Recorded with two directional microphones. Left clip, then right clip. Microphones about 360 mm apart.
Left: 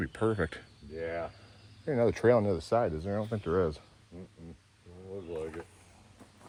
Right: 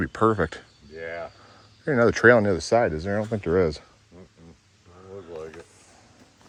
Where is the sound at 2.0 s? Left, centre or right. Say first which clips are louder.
Right 9 dB; right.